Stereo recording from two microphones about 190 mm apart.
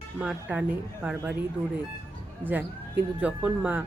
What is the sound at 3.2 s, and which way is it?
Speech, 5° right (ahead or behind).